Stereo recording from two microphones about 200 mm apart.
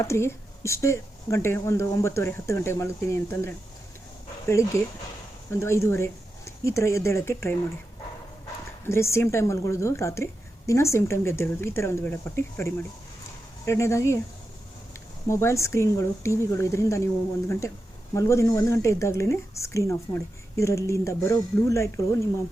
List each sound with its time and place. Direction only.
0.0 s speech: 15° left (ahead or behind)
4.7 s speech: 15° left (ahead or behind)
8.9 s speech: 15° left (ahead or behind)
15.3 s speech: 15° left (ahead or behind)
18.1 s speech: 15° left (ahead or behind)